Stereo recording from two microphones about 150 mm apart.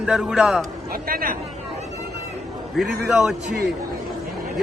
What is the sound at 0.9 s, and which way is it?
Speech, 80° right.